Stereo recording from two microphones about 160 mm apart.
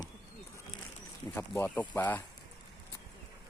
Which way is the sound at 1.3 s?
10° left (ahead or behind).